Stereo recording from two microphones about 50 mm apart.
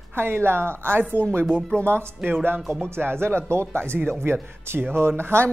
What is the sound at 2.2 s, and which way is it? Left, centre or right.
Speech, right.